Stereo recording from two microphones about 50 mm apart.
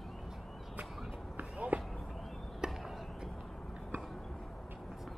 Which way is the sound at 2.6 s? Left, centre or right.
Centre.